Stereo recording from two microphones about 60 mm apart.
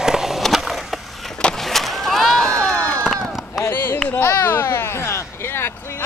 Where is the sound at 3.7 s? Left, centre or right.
Left.